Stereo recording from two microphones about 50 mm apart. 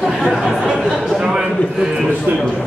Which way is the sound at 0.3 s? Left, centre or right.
Centre.